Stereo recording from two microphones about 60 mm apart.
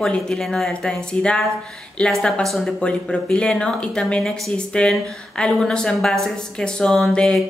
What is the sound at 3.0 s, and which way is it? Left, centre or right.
A woman's voice, centre.